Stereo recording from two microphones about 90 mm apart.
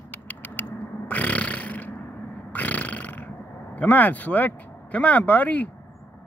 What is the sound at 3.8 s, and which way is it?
Speech, 15° left (ahead or behind).